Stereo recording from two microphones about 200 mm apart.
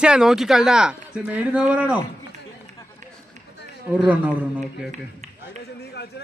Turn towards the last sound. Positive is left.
turn(degrees=55)  # may be behind; listen again after turning